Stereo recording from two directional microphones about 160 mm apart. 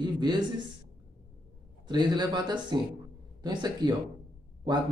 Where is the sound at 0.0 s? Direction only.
30° right (ahead or behind).